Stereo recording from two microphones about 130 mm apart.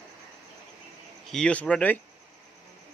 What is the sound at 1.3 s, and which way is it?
Speech, 10° left (ahead or behind).